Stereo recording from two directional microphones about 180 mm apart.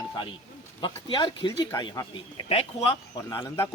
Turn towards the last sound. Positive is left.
turn(degrees=25)  # may be behind; listen again after turning